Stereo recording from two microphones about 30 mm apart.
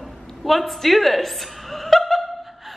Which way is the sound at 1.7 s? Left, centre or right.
Centre.